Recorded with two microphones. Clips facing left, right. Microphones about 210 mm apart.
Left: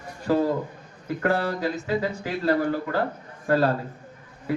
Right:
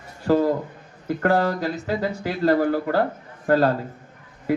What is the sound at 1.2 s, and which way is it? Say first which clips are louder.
A man's voice: right 3 dB; 40° right (ahead or behind).